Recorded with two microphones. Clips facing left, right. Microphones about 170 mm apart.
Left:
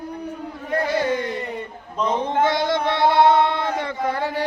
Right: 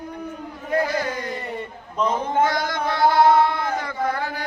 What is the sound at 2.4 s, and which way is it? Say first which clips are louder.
Male singing: left 2 dB; 25° left (ahead or behind).